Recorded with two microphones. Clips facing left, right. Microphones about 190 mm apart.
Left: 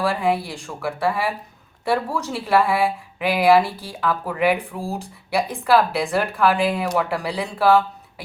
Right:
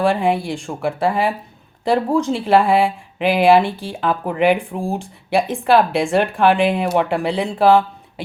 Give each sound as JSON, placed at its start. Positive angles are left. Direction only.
{"t": 0.0, "sound": "speech", "side_deg": -30}